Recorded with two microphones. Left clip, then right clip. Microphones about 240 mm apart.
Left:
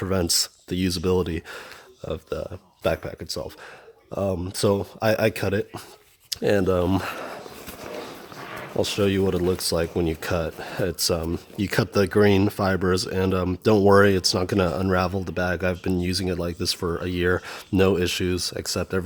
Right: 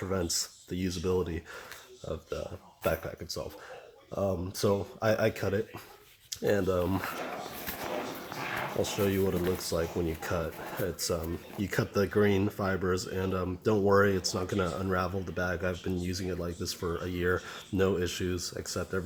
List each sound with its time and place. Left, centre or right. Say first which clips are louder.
0.0 s speech: left 9 dB; left
8.8 s speech: left 8 dB; left